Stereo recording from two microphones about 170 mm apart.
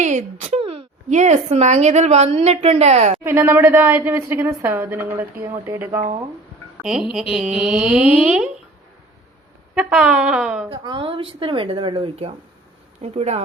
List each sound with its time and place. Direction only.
0.0 s a sound: 45° right (ahead or behind)
1.1 s a woman's voice: 45° right (ahead or behind)
3.2 s a woman's voice: 15° right (ahead or behind)
6.8 s speech: 5° right (ahead or behind)
9.7 s speech: 5° right (ahead or behind)
10.7 s a woman's voice: 30° right (ahead or behind)